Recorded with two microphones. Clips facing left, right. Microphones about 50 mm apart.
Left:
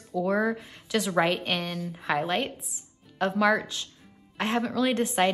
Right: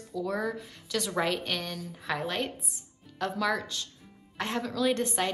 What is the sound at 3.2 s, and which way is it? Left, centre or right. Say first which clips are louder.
A woman's voice: left 6 dB; left.